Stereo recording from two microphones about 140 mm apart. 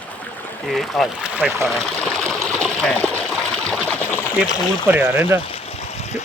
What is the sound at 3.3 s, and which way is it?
Trickle, centre (ahead or behind).